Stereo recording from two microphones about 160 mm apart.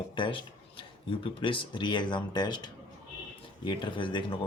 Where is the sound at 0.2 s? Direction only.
30° left (ahead or behind).